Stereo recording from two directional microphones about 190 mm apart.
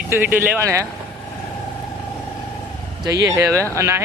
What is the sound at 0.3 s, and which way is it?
Speech, 10° right (ahead or behind).